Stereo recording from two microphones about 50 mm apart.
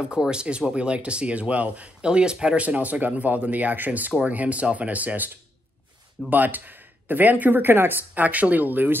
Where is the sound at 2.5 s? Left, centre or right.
Right.